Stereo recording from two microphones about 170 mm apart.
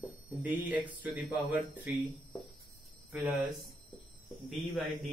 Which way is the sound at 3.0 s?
15° right (ahead or behind).